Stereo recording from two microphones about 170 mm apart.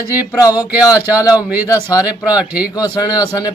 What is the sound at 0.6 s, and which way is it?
Speech, 10° right (ahead or behind).